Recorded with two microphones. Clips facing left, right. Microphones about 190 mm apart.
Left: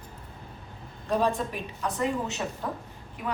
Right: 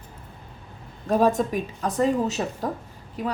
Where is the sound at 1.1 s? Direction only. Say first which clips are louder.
Right 6 dB; 45° right (ahead or behind).